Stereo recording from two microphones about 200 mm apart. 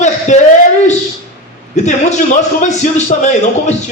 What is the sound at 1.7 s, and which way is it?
A man's voice, 35° left (ahead or behind).